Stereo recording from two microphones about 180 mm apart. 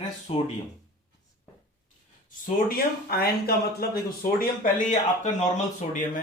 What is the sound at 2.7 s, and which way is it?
Speech, 60° left (ahead or behind).